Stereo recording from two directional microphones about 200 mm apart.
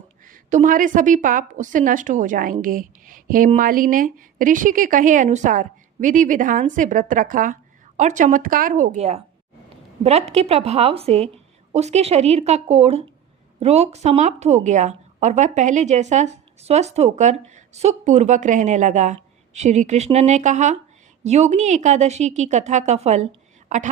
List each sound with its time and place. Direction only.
0.3 s a woman's voice: 40° right (ahead or behind)